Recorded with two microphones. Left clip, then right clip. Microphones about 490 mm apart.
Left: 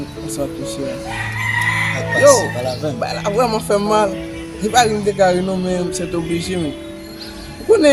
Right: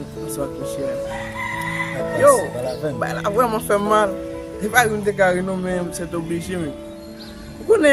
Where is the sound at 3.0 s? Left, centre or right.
Right.